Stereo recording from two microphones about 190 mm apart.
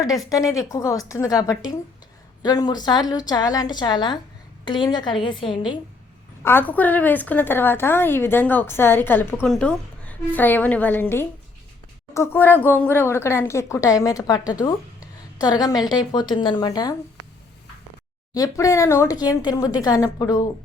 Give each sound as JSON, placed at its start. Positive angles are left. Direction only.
{"t": 0.3, "sound": "a woman's voice", "side_deg": 20}
{"t": 6.4, "sound": "a woman's voice", "side_deg": 10}
{"t": 18.3, "sound": "speech", "side_deg": 20}